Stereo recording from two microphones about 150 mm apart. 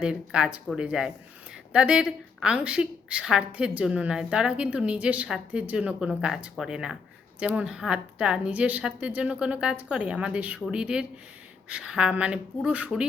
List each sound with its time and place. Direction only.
0.0 s a woman's voice: 5° right (ahead or behind)